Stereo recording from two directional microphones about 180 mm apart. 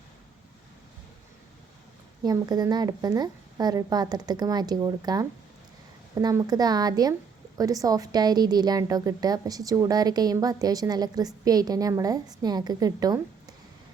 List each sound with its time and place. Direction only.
2.2 s a woman's voice: 20° right (ahead or behind)